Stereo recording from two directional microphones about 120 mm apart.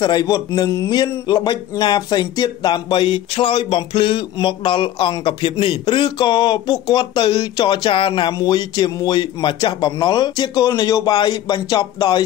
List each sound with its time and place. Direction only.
0.0 s speech: 35° left (ahead or behind)